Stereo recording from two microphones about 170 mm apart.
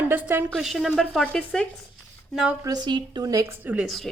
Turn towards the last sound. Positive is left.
turn(degrees=0)  # may be behind; listen again after turning